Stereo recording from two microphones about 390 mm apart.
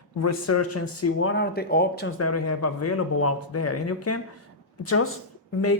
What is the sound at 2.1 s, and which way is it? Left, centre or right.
Speech, left.